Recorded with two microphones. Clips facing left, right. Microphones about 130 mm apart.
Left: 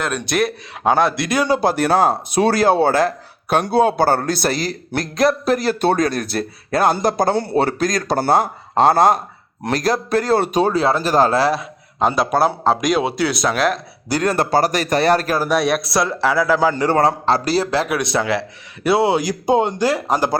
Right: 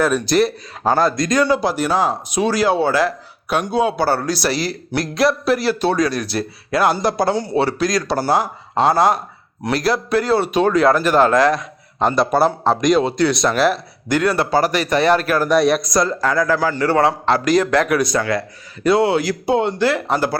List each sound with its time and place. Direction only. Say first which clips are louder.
0.0 s a man's voice: right 4 dB; centre (ahead or behind)
1.5 s speech: left 1 dB; 55° left (ahead or behind)
3.5 s speech: left 3 dB; 35° left (ahead or behind)
3.9 s a man's voice: left 2 dB; 50° left (ahead or behind); by 11.5 s 35° left (ahead or behind)
11.5 s a man's voice: even; centre (ahead or behind)
14.1 s speech: right 1 dB; 40° left (ahead or behind)
15.4 s a man's voice: right 3 dB; centre (ahead or behind)
16.6 s a man's voice: left 2 dB; 20° left (ahead or behind)
16.9 s speech: even; 40° left (ahead or behind)
18.1 s speech: even; 10° left (ahead or behind)